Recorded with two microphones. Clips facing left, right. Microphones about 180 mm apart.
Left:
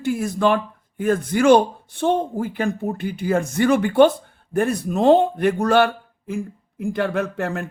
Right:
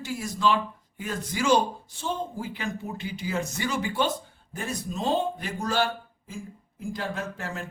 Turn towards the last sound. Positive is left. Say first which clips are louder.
# left 10 dB
turn(degrees=60)  # may be behind; listen again after turning